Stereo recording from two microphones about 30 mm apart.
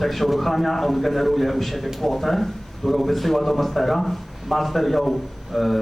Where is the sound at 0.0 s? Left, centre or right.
Centre.